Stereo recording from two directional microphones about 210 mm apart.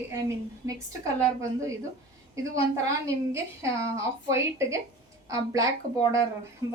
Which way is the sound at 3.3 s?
15° right (ahead or behind).